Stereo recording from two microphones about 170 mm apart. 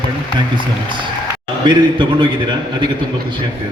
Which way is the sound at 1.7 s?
30° right (ahead or behind).